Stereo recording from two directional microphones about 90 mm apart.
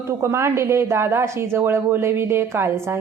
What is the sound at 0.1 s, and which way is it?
A woman's voice, 30° right (ahead or behind).